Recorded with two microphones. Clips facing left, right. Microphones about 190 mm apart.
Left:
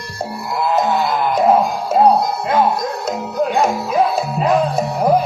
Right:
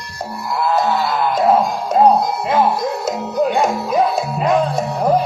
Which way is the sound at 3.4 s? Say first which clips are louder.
Even; centre (ahead or behind).